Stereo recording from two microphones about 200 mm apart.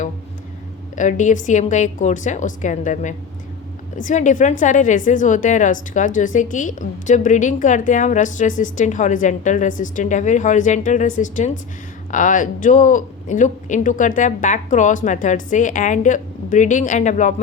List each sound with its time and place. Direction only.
0.9 s a woman's voice: 40° left (ahead or behind)